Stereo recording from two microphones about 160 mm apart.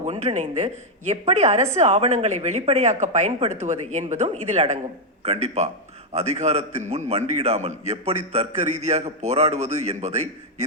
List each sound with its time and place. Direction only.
0.0 s a man's voice: 40° right (ahead or behind)